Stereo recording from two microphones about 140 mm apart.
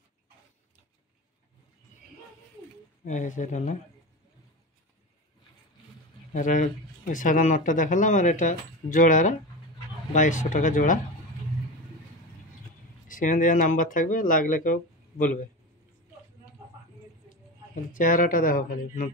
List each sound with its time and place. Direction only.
3.1 s speech: 65° left (ahead or behind)
6.3 s speech: 65° left (ahead or behind)
13.1 s speech: 70° left (ahead or behind)
17.9 s speech: 70° left (ahead or behind)